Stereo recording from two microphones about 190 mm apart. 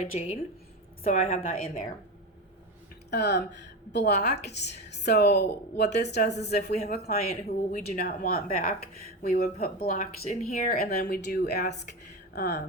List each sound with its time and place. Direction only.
0.0 s a woman's voice: 35° left (ahead or behind)
3.1 s a woman's voice: 60° left (ahead or behind)
11.9 s a sound: 60° left (ahead or behind)